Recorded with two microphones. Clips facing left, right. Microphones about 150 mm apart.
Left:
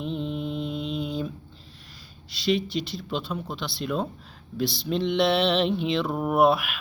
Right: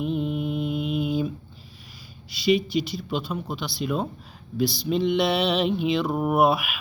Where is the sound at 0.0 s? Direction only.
5° right (ahead or behind).